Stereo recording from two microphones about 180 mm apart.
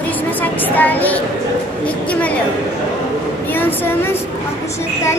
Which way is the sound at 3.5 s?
10° left (ahead or behind).